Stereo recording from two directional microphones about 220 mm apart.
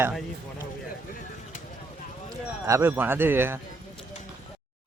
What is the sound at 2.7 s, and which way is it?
Speech, 10° right (ahead or behind).